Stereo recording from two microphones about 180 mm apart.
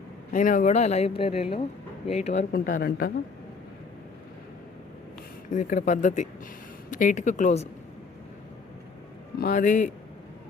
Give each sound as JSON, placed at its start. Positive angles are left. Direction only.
{"t": 0.3, "sound": "speech", "side_deg": 45}
{"t": 2.5, "sound": "speech", "side_deg": 50}
{"t": 5.5, "sound": "speech", "side_deg": 45}
{"t": 9.4, "sound": "speech", "side_deg": 50}